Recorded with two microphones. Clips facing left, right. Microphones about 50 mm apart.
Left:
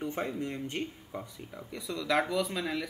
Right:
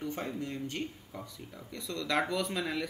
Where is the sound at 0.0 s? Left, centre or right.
Left.